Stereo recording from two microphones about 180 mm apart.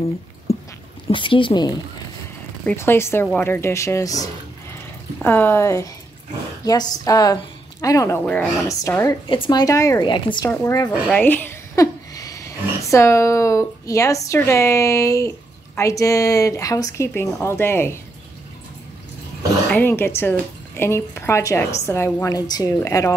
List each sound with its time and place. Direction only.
0.5 s a sound: 35° left (ahead or behind)
1.1 s speech: 30° left (ahead or behind)
2.6 s a woman's voice: 10° left (ahead or behind)
10.5 s a woman's voice: 15° left (ahead or behind)
10.9 s speech: 5° left (ahead or behind)
19.7 s a woman's voice: 10° left (ahead or behind)